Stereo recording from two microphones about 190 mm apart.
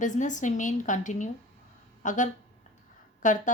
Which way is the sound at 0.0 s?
40° left (ahead or behind).